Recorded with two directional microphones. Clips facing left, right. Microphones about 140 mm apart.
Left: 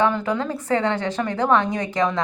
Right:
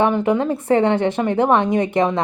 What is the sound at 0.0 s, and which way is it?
A woman's voice, 25° right (ahead or behind).